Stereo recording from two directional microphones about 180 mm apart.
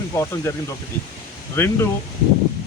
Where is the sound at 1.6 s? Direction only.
10° left (ahead or behind).